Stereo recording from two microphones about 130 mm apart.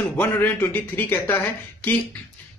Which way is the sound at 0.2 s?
15° left (ahead or behind).